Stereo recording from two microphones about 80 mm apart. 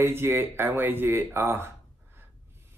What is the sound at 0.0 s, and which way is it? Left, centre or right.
Speech, right.